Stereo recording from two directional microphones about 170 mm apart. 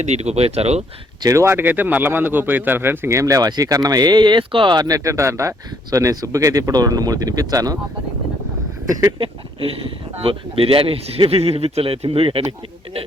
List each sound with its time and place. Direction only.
0.0 s speech: 40° right (ahead or behind)
1.2 s speech: 20° right (ahead or behind)
9.0 s speech: 25° right (ahead or behind)